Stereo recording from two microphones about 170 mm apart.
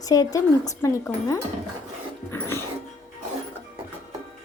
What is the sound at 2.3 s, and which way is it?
Dog, 15° left (ahead or behind).